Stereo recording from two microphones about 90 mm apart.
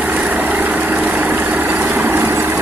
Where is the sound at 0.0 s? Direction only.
15° right (ahead or behind).